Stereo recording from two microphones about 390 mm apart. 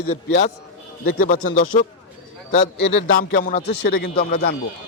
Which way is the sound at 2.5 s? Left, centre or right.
Left.